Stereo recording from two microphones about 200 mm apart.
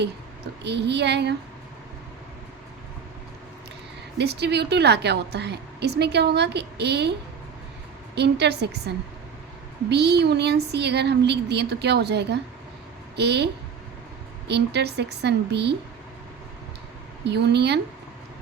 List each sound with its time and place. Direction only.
0.6 s a woman's voice: 60° right (ahead or behind)
4.2 s a woman's voice: 55° right (ahead or behind)
8.1 s a woman's voice: 55° right (ahead or behind)
17.2 s a woman's voice: 60° right (ahead or behind)